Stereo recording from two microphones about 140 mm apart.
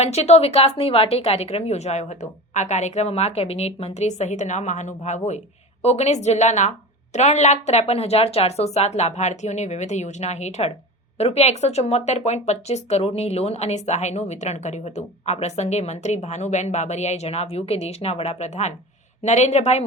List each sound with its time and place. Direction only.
0.0 s speech: 50° left (ahead or behind)